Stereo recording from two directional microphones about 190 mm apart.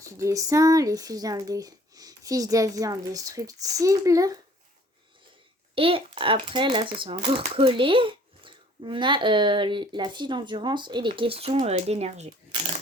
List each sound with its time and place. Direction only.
0.0 s a child's voice: 15° right (ahead or behind)
5.7 s a child's voice: 30° right (ahead or behind)